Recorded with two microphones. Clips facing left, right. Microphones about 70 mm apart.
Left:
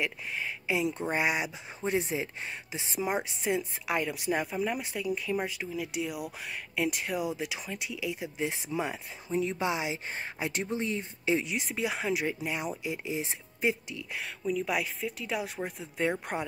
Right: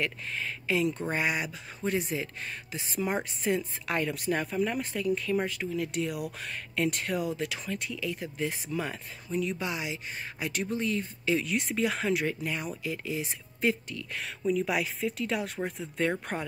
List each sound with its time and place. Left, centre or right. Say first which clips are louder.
0.0 s speech: even; centre
3.0 s speech: even; centre
9.3 s speech: left 2 dB; left
11.4 s speech: right 3 dB; centre